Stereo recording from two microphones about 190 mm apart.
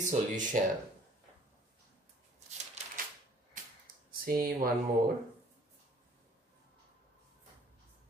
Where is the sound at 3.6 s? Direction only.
45° right (ahead or behind).